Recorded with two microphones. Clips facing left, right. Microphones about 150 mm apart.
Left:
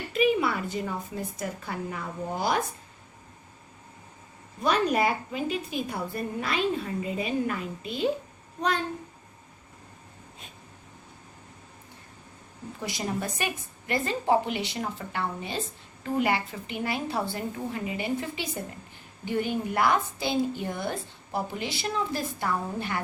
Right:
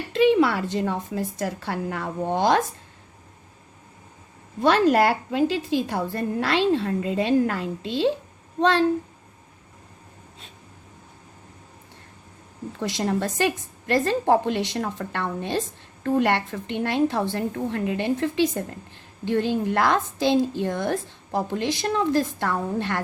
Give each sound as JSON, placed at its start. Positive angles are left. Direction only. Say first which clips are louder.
{"t": 0.1, "sound": "a woman's voice", "louder": "right 6 dB", "side_deg": -85}
{"t": 4.6, "sound": "a woman's voice", "louder": "right 6 dB", "side_deg": -90}
{"t": 13.0, "sound": "a woman's voice", "louder": "right 8 dB", "side_deg": -80}